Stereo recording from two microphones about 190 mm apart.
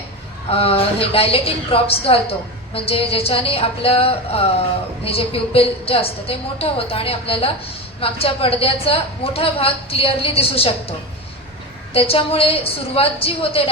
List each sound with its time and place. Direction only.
0.5 s a woman's voice: 30° left (ahead or behind)
11.9 s a woman's voice: 30° left (ahead or behind)